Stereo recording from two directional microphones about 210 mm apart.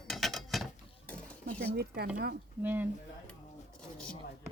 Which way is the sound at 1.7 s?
50° right (ahead or behind).